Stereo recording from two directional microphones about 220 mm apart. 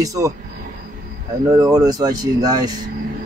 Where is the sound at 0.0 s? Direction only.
15° right (ahead or behind).